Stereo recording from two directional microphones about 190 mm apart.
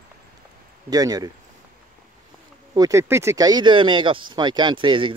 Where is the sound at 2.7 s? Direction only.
20° right (ahead or behind).